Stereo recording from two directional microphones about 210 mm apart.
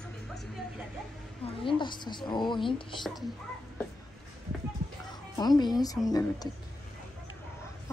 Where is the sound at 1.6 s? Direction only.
20° left (ahead or behind).